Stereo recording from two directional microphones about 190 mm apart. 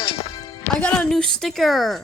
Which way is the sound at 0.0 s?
25° left (ahead or behind).